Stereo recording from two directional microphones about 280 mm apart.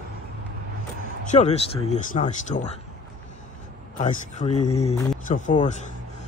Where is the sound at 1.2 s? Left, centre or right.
Left.